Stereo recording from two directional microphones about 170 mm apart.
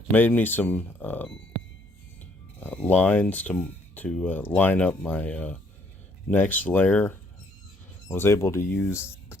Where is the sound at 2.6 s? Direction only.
10° left (ahead or behind).